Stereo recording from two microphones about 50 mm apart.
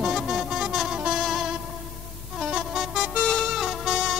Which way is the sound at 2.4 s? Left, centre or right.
Centre.